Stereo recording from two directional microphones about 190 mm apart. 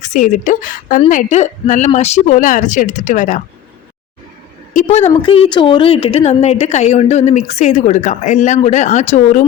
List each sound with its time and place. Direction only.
0.0 s a woman's voice: 40° left (ahead or behind)
4.7 s a woman's voice: 40° left (ahead or behind)